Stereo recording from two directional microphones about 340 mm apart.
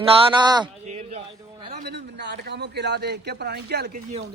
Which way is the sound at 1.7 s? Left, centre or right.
Right.